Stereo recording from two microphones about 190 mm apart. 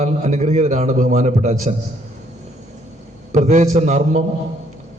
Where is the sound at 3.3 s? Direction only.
40° right (ahead or behind).